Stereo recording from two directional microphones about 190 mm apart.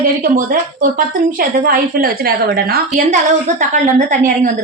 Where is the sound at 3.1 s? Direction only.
40° right (ahead or behind).